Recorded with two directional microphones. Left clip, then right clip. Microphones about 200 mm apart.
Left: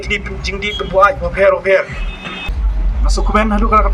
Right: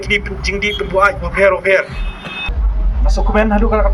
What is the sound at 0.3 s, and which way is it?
Speech, 45° right (ahead or behind).